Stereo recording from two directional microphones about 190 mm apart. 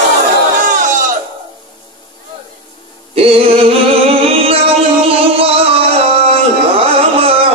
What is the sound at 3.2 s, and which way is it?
Music, 30° right (ahead or behind).